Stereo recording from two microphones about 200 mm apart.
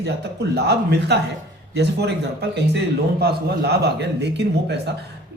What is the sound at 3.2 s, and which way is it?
A man's voice, 55° right (ahead or behind).